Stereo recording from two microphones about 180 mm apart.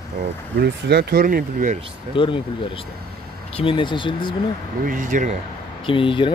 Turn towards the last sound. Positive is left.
turn(degrees=30)  # may be behind; listen again after turning